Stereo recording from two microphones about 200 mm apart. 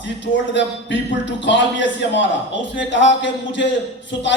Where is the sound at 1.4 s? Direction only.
65° left (ahead or behind).